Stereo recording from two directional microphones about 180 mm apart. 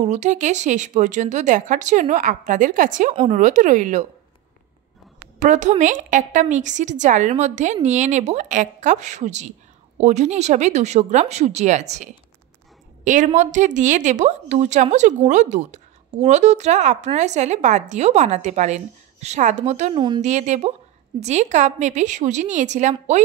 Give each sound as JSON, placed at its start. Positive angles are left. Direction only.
{"t": 0.0, "sound": "a woman's voice", "side_deg": -40}
{"t": 5.4, "sound": "a woman's voice", "side_deg": -45}